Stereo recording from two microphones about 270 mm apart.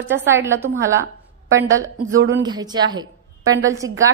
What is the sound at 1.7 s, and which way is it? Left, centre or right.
Speech, right.